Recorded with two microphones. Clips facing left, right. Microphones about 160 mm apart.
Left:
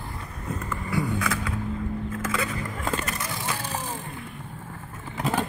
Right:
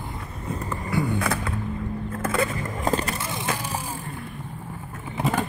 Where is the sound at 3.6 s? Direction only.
10° right (ahead or behind).